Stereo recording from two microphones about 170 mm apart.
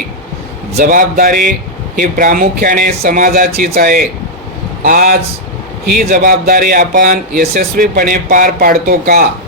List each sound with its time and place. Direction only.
0.8 s speech: 55° right (ahead or behind)